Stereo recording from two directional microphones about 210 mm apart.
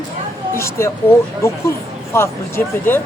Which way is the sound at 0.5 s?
10° left (ahead or behind).